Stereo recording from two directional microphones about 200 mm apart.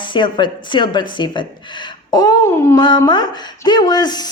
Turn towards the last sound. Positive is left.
turn(degrees=20)  # may be behind; listen again after turning